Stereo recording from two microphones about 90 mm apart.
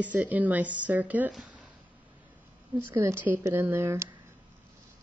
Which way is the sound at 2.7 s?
25° right (ahead or behind).